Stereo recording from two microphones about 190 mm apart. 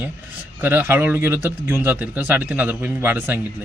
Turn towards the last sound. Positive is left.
turn(degrees=-10)  # may be behind; listen again after turning